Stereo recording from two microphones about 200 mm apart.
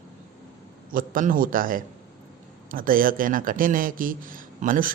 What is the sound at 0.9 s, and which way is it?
A man's voice, 45° right (ahead or behind).